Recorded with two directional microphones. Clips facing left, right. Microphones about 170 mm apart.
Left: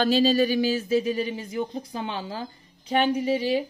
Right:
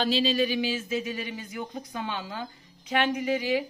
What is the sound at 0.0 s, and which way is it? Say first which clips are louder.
A woman's voice: left 5 dB; 45° left (ahead or behind).